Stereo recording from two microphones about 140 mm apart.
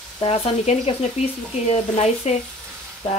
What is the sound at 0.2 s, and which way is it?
Speech, 45° left (ahead or behind).